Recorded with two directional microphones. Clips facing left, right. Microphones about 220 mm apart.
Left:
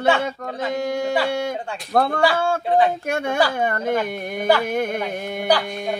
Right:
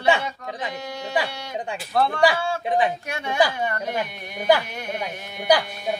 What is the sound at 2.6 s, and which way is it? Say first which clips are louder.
Speech: left 3 dB; 15° right (ahead or behind).